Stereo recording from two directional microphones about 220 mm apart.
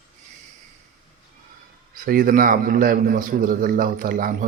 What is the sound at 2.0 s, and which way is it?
A man's voice, 40° right (ahead or behind).